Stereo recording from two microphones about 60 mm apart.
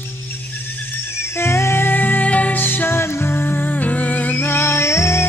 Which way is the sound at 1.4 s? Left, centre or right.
Left.